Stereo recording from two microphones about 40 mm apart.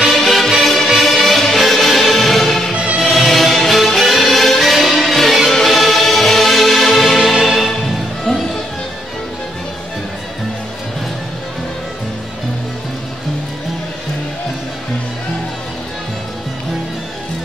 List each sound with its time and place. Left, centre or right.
0.0 s music: centre
2.7 s music: right
3.0 s music: centre
8.3 s music: centre